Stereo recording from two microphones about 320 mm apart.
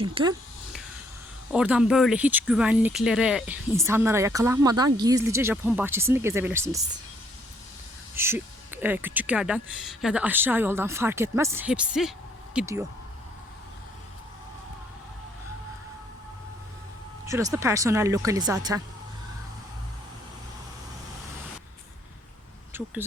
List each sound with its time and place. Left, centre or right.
0.0 s speech: centre
1.5 s speech: centre
8.1 s speech: centre
17.2 s speech: centre
22.7 s speech: centre